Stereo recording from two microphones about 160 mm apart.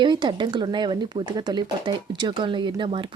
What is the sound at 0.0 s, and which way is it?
Speech, 30° right (ahead or behind).